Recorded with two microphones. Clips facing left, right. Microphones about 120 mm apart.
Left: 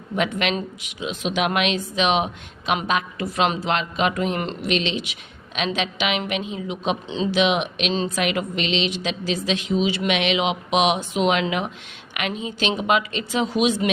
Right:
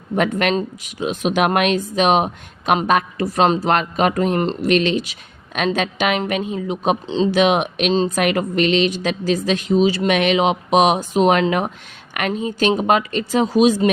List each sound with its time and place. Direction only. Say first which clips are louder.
0.2 s speech: right 5 dB; 45° right (ahead or behind)